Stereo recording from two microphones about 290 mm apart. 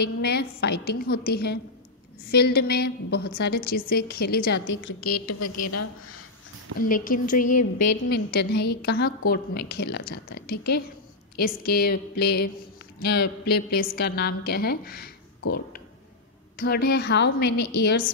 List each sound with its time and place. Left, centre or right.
0.0 s a woman's voice: left
6.8 s a woman's voice: left
17.5 s a woman's voice: left
17.8 s a woman's voice: left